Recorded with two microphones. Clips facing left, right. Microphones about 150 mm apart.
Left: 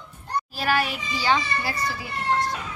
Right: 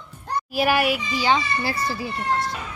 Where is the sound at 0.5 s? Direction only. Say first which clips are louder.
Right 5 dB; 10° right (ahead or behind).